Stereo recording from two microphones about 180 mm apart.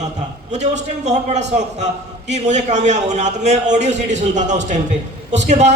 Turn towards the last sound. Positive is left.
turn(degrees=-40)  # may be behind; listen again after turning